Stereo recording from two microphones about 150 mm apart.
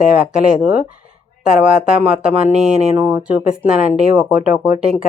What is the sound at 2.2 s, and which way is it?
Speech, 5° right (ahead or behind).